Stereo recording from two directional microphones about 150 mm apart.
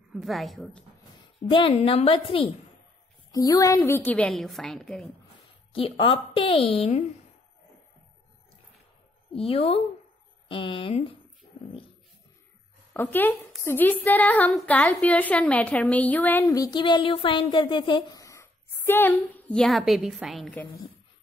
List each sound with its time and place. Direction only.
0.1 s a woman's voice: centre (ahead or behind)
1.5 s speech: 35° left (ahead or behind)
3.3 s a woman's voice: 25° left (ahead or behind); by 5.1 s centre (ahead or behind)
5.7 s speech: 35° left (ahead or behind)
9.3 s speech: 40° left (ahead or behind)
12.9 s a woman's voice: 15° left (ahead or behind)
16.4 s speech: 25° left (ahead or behind)
18.2 s a woman's voice: 20° left (ahead or behind); by 20.5 s centre (ahead or behind)